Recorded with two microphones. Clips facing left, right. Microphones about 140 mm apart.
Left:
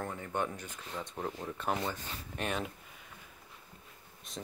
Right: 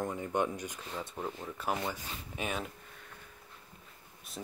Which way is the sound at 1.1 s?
Centre (ahead or behind).